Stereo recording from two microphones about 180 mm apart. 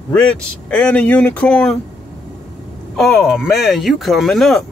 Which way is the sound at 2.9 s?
Centre (ahead or behind).